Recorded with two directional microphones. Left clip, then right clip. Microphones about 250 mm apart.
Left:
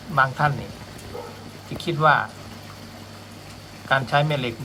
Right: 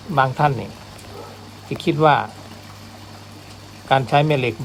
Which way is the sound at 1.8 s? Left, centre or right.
Right.